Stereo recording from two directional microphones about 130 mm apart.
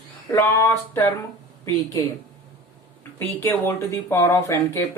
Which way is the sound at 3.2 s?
15° left (ahead or behind).